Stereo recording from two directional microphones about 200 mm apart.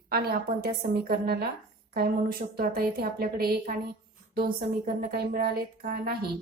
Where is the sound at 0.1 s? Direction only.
50° right (ahead or behind).